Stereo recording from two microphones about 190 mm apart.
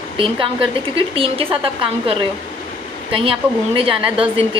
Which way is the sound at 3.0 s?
30° right (ahead or behind).